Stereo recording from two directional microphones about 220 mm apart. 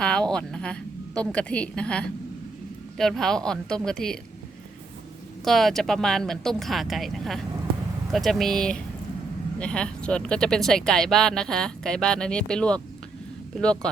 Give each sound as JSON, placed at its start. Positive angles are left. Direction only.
{"t": 0.0, "sound": "speech", "side_deg": 5}
{"t": 5.5, "sound": "speech", "side_deg": 0}